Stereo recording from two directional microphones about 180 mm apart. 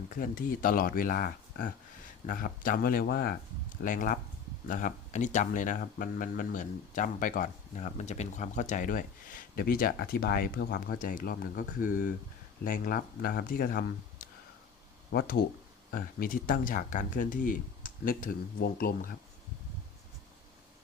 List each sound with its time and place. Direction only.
0.2 s speech: 50° left (ahead or behind)
3.8 s speech: 45° left (ahead or behind)